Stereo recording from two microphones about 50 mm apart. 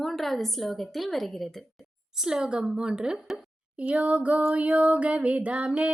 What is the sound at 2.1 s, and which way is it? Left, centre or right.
A woman's voice, centre.